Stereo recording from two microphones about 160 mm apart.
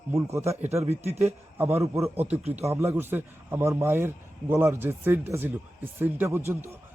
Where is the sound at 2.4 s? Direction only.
40° right (ahead or behind).